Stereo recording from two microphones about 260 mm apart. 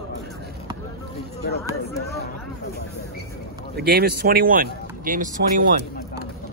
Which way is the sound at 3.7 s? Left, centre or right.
Right.